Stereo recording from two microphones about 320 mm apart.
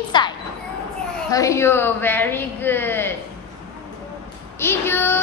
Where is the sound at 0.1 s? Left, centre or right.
Centre.